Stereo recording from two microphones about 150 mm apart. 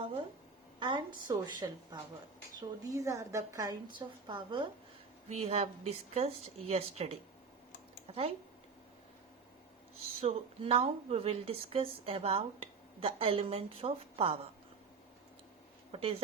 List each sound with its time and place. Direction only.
0.8 s a woman's voice: 30° right (ahead or behind)
5.3 s speech: 45° right (ahead or behind)
10.0 s speech: 40° right (ahead or behind)
15.9 s speech: 40° right (ahead or behind)